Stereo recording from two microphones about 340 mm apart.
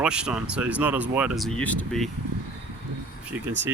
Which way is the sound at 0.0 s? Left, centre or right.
Centre.